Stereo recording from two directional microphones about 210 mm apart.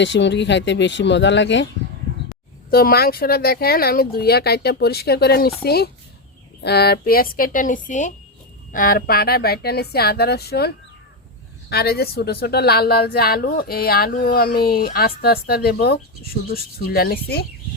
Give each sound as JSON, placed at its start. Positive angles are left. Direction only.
{"t": 0.0, "sound": "speech", "side_deg": 60}
{"t": 2.6, "sound": "a woman's voice", "side_deg": 45}
{"t": 11.7, "sound": "a woman's voice", "side_deg": 50}